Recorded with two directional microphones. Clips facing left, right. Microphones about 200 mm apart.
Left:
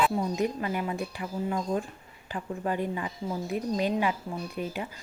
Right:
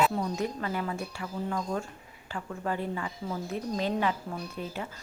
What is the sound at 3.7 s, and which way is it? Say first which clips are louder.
Speech: left 1 dB; 15° left (ahead or behind).